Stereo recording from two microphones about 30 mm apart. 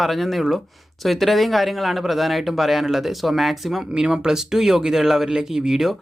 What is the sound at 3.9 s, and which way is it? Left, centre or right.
Speech, right.